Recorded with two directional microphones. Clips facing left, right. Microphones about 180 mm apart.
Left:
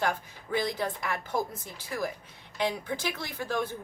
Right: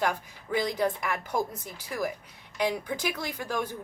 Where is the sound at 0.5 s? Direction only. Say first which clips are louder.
Right 3 dB; 15° right (ahead or behind).